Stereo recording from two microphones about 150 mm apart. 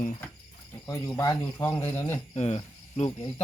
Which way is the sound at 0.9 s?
20° left (ahead or behind).